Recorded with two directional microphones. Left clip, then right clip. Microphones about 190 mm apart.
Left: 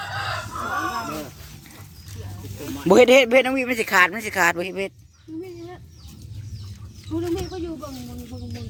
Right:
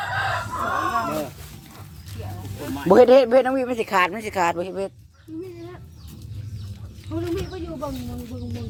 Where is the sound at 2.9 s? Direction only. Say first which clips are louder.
Right 1 dB; 15° left (ahead or behind).